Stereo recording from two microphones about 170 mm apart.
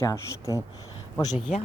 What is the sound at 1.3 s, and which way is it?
Speech, 45° left (ahead or behind).